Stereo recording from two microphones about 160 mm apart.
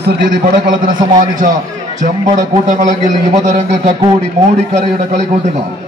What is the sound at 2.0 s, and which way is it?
A man's voice, 50° right (ahead or behind).